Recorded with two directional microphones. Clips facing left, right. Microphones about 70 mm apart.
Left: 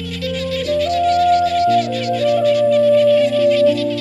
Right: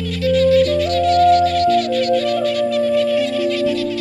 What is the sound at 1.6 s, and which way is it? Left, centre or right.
Music, right.